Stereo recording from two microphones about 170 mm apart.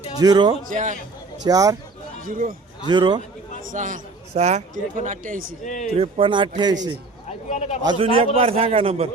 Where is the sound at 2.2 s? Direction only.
55° right (ahead or behind).